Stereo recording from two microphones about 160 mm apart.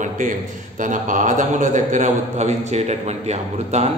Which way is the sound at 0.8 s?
55° right (ahead or behind).